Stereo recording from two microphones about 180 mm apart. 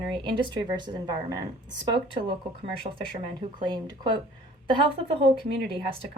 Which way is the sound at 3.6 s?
25° right (ahead or behind).